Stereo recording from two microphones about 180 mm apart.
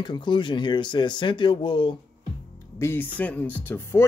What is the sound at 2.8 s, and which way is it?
Speech, 10° left (ahead or behind).